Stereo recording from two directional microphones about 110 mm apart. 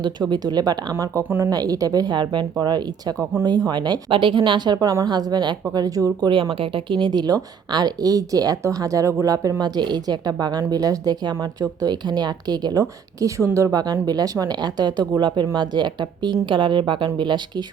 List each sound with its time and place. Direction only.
0.0 s speech: 40° right (ahead or behind)
1.2 s speech: 20° right (ahead or behind)
1.5 s speech: 35° right (ahead or behind)
6.3 s a woman's voice: 55° right (ahead or behind)